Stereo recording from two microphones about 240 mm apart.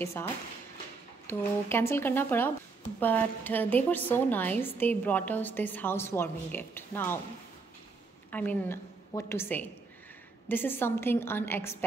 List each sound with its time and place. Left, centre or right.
0.0 s a woman's voice: centre
8.3 s a woman's voice: centre